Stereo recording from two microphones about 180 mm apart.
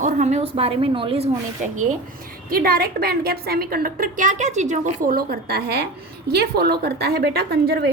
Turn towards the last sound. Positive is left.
turn(degrees=-60)  # may be behind; listen again after turning